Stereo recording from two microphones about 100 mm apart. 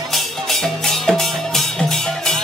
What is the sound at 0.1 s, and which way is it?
Music, centre (ahead or behind).